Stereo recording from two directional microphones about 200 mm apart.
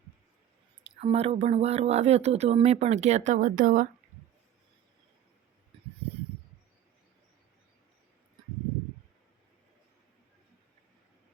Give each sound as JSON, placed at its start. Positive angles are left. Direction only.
{"t": 1.0, "sound": "speech", "side_deg": -30}